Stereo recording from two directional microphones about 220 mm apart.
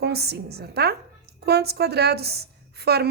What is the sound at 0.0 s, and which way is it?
A woman's voice, 45° right (ahead or behind).